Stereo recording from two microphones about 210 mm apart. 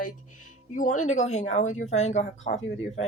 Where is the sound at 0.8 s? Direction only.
35° left (ahead or behind).